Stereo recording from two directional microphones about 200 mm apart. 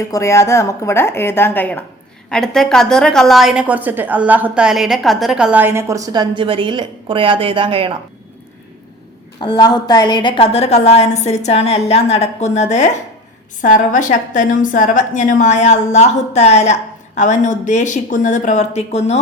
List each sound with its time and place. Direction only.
0.0 s a woman's voice: 15° left (ahead or behind); by 7.9 s 25° right (ahead or behind)
9.4 s a woman's voice: 20° left (ahead or behind)